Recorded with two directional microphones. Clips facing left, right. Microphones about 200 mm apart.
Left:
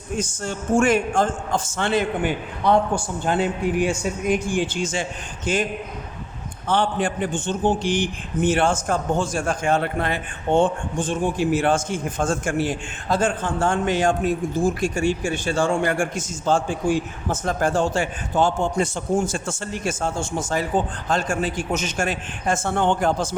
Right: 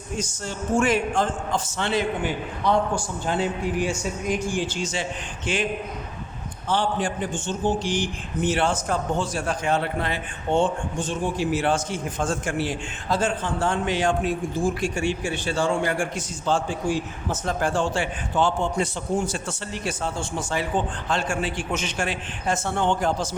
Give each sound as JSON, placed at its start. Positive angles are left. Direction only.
{"t": 0.2, "sound": "a man's voice", "side_deg": 50}
{"t": 6.7, "sound": "a man's voice", "side_deg": 60}